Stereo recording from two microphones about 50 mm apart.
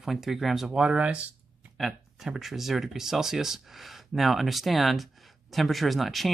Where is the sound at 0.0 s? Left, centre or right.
Centre.